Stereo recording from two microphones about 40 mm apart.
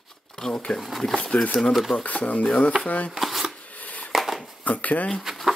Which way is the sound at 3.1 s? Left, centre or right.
Centre.